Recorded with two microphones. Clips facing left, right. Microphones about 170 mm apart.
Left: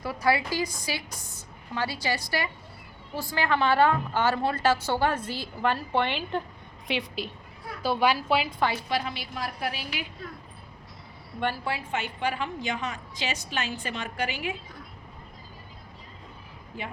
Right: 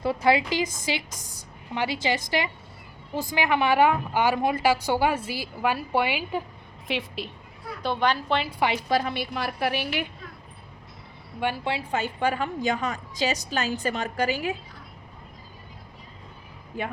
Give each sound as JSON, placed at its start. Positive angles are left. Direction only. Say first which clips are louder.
{"t": 0.0, "sound": "a woman's voice", "louder": "right 4 dB", "side_deg": -25}
{"t": 1.1, "sound": "a woman's voice", "louder": "even", "side_deg": -40}
{"t": 1.7, "sound": "a woman's voice", "louder": "right 3 dB", "side_deg": -20}
{"t": 8.4, "sound": "a woman's voice", "louder": "right 1 dB", "side_deg": -10}
{"t": 8.9, "sound": "a woman's voice", "louder": "right 5 dB", "side_deg": -45}
{"t": 11.6, "sound": "a woman's voice", "louder": "right 3 dB", "side_deg": -30}